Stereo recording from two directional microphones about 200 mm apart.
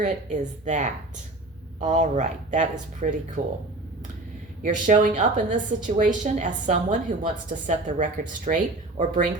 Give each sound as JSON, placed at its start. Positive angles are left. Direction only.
{"t": 0.0, "sound": "a woman's voice", "side_deg": -35}
{"t": 4.6, "sound": "a woman's voice", "side_deg": -40}